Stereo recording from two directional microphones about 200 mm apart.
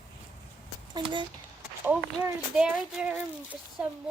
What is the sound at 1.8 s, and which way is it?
A child's voice, 10° right (ahead or behind).